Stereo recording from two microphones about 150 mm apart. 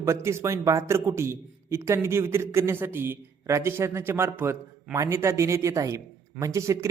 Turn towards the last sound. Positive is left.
turn(degrees=-20)  # may be behind; listen again after turning